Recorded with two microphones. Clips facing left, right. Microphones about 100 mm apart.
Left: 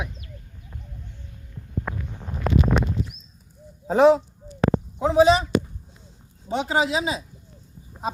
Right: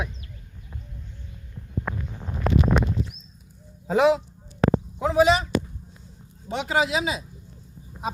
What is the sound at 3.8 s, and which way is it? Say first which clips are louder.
A man's voice: left 3 dB; 35° left (ahead or behind).